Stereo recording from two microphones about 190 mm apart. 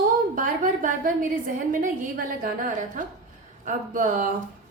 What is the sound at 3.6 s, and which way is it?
Speech, 45° right (ahead or behind).